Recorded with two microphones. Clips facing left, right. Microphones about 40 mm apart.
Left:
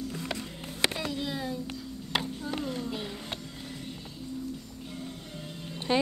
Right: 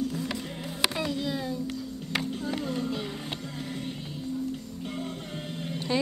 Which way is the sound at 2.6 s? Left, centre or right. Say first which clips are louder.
Right 3 dB; right.